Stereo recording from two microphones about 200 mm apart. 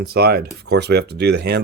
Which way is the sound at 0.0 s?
50° right (ahead or behind).